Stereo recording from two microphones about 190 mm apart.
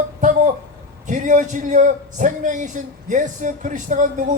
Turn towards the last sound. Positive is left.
turn(degrees=-40)  # may be behind; listen again after turning